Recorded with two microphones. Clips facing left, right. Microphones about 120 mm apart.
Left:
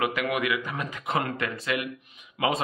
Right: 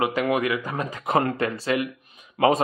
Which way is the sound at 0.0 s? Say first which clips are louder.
Right 4 dB; 30° right (ahead or behind).